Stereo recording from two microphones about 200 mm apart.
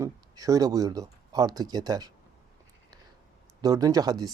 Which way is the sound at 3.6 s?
20° right (ahead or behind).